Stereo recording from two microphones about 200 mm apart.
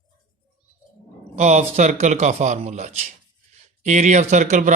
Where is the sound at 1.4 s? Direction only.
35° right (ahead or behind).